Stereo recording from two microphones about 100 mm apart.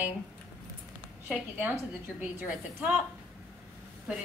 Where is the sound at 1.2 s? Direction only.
15° right (ahead or behind).